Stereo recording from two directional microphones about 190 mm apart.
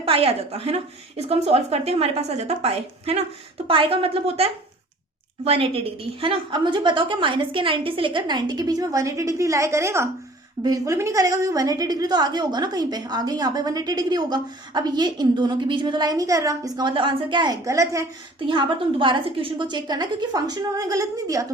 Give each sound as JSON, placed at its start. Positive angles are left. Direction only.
{"t": 0.0, "sound": "a woman's voice", "side_deg": -30}